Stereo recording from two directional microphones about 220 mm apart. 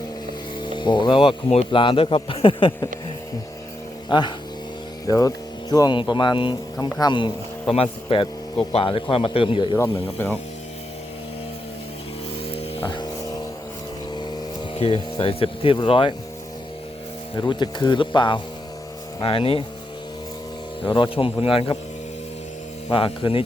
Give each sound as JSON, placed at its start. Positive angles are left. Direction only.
{"t": 0.6, "sound": "speech", "side_deg": 20}
{"t": 4.1, "sound": "speech", "side_deg": 20}
{"t": 12.5, "sound": "music", "side_deg": 20}
{"t": 14.8, "sound": "speech", "side_deg": 30}
{"t": 17.4, "sound": "speech", "side_deg": 20}
{"t": 20.8, "sound": "speech", "side_deg": 20}
{"t": 22.9, "sound": "speech", "side_deg": 25}